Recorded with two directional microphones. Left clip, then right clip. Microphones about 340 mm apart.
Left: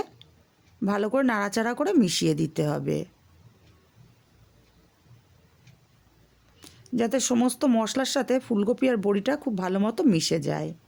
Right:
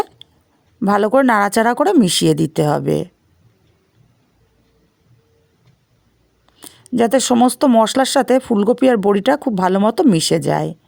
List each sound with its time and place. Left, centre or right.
0.2 s a sound: right
0.8 s speech: right
6.6 s speech: right